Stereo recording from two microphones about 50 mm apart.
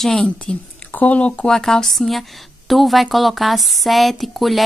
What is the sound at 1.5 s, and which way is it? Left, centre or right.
A woman's voice, centre.